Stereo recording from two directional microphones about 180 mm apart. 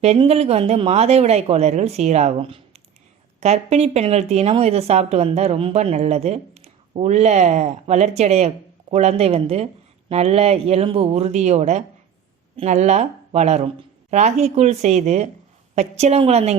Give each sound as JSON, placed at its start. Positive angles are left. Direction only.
{"t": 0.0, "sound": "speech", "side_deg": -35}